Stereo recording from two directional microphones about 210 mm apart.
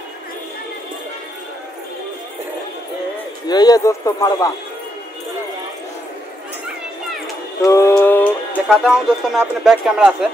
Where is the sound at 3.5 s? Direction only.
20° left (ahead or behind).